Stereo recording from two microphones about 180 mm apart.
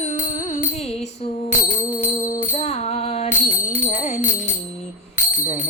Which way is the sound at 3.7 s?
45° left (ahead or behind).